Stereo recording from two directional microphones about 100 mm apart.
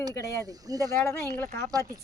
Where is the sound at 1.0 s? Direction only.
25° left (ahead or behind).